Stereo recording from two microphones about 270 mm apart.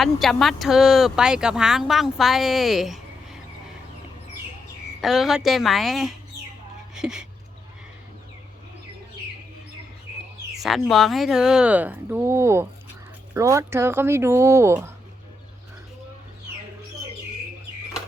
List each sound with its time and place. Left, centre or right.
0.0 s speech: centre
4.9 s speech: centre
10.6 s speech: centre